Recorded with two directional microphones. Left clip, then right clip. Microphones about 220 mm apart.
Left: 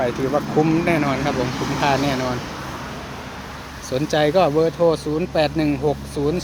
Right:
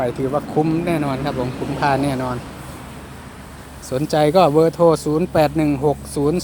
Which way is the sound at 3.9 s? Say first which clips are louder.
Right 2 dB; 20° right (ahead or behind).